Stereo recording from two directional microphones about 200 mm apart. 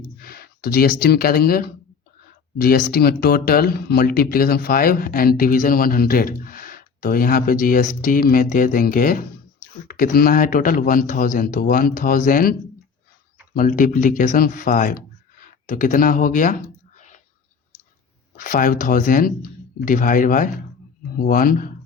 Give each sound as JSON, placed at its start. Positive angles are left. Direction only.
{"t": 0.2, "sound": "speech", "side_deg": 50}
{"t": 18.3, "sound": "speech", "side_deg": 45}